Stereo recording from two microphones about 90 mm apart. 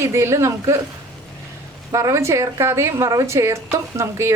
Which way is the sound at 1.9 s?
35° right (ahead or behind).